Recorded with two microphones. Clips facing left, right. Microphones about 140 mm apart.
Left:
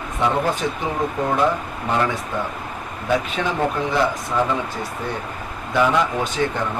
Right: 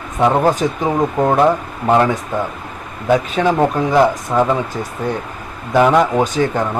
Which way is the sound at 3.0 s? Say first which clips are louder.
Right 7 dB; 45° right (ahead or behind).